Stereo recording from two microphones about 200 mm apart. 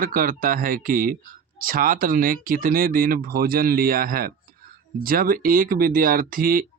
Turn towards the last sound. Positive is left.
turn(degrees=-45)  # may be behind; listen again after turning